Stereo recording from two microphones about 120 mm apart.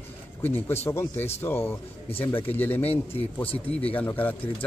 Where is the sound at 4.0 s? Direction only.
15° left (ahead or behind).